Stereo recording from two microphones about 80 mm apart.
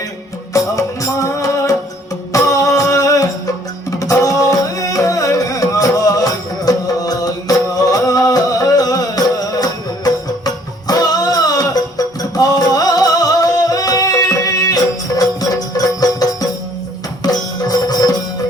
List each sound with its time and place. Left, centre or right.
0.5 s music: left